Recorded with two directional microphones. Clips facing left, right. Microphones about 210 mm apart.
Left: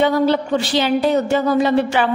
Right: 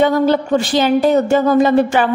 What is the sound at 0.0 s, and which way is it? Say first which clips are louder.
A woman's voice: right 2 dB; 45° right (ahead or behind).